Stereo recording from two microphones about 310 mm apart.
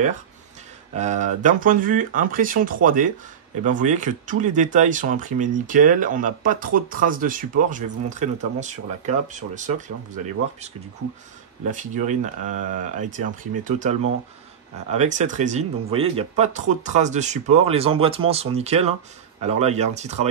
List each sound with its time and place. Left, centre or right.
0.9 s speech: right
11.7 s speech: right